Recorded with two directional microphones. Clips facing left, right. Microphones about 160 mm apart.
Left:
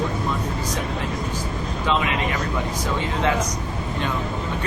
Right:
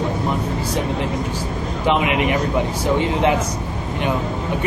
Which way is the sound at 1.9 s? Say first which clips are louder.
Right 5 dB; 20° right (ahead or behind).